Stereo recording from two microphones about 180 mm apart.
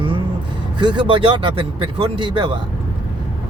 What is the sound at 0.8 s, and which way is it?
Speech, 25° right (ahead or behind).